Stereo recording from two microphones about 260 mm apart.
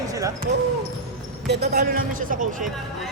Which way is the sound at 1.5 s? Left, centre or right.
Right.